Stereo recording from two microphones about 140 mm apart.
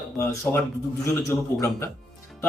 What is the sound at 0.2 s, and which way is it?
Speech, 20° left (ahead or behind).